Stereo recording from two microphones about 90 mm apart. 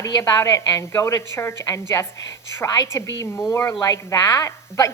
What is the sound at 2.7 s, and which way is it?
A woman's voice, 35° left (ahead or behind).